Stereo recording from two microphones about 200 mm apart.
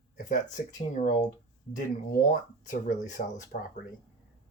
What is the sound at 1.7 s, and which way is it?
Speech, 40° left (ahead or behind).